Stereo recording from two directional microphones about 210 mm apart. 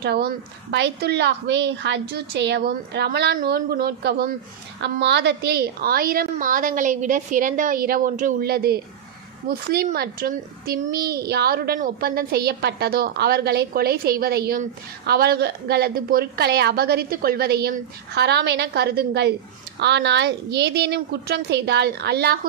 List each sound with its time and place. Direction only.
0.0 s a child's voice: 50° right (ahead or behind)